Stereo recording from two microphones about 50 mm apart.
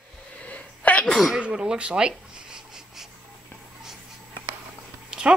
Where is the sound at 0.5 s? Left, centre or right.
Left.